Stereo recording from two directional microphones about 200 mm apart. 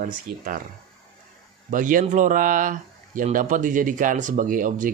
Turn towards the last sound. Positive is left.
turn(degrees=-40)  # may be behind; listen again after turning